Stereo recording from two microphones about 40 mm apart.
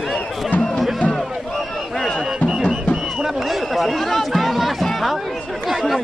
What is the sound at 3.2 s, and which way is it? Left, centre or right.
Chatter, centre.